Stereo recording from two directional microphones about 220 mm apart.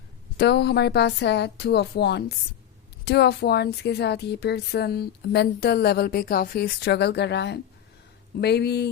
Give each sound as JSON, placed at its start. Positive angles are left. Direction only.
{"t": 0.3, "sound": "a woman's voice", "side_deg": 50}